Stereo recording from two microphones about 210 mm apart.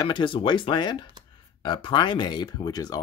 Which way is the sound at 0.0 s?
25° left (ahead or behind).